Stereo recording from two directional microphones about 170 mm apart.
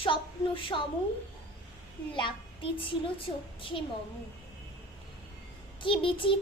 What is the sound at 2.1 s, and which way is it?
Speech, 30° left (ahead or behind).